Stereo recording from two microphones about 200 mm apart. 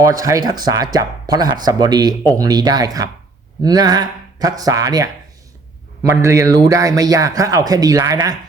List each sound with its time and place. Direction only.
0.0 s a man's voice: 15° right (ahead or behind)